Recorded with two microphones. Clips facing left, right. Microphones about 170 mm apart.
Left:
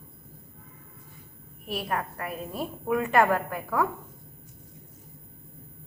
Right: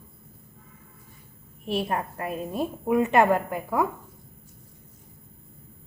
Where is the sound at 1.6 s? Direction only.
25° right (ahead or behind).